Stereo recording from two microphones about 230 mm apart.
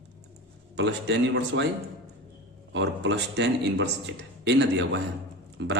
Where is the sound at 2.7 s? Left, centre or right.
Right.